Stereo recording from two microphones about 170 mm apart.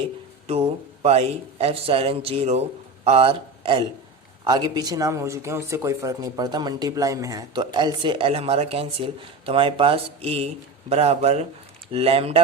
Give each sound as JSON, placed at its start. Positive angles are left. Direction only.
{"t": 0.4, "sound": "a man's voice", "side_deg": -35}